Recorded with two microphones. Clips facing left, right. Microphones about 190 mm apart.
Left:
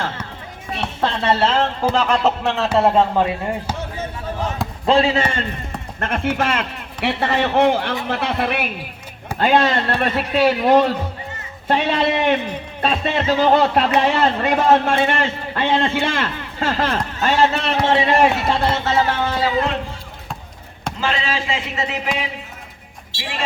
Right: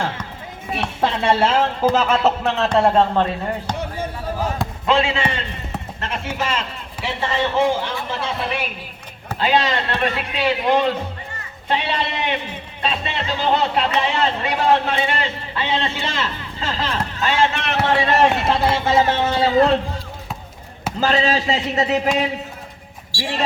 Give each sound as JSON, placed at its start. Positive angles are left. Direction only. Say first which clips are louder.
{"t": 0.8, "sound": "a man's voice", "louder": "right 1 dB", "side_deg": -10}
{"t": 4.9, "sound": "speech", "louder": "left 3 dB", "side_deg": 35}
{"t": 6.0, "sound": "a man's voice", "louder": "left 6 dB", "side_deg": 55}
{"t": 9.4, "sound": "a man's voice", "louder": "left 3 dB", "side_deg": 50}
{"t": 17.7, "sound": "a man's voice", "louder": "left 1 dB", "side_deg": 20}
{"t": 18.3, "sound": "speech", "louder": "even", "side_deg": -5}
{"t": 19.0, "sound": "speech", "louder": "right 2 dB", "side_deg": -25}
{"t": 21.0, "sound": "a man's voice", "louder": "right 5 dB", "side_deg": -40}
{"t": 23.1, "sound": "speech", "louder": "right 5 dB", "side_deg": 20}